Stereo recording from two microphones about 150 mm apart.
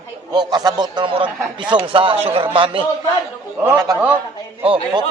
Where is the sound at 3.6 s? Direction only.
25° right (ahead or behind).